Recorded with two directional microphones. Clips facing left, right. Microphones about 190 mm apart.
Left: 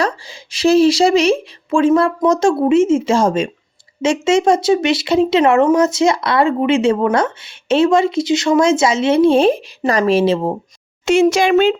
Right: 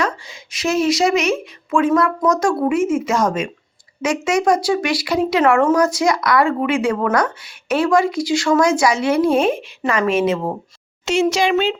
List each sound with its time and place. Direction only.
0.0 s speech: 30° left (ahead or behind)
11.0 s a child's voice: 55° left (ahead or behind)